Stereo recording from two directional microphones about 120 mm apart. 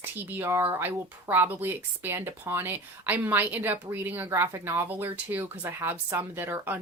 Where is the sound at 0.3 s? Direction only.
15° right (ahead or behind).